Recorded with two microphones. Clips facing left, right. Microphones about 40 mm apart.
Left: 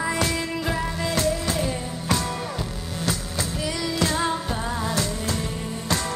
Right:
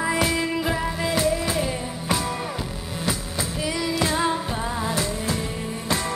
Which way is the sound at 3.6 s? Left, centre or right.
Centre.